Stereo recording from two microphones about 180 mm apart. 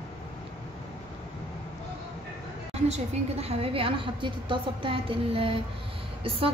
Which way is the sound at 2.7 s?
35° right (ahead or behind).